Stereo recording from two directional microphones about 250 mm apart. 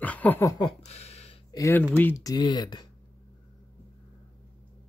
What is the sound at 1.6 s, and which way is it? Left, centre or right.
Speech, centre.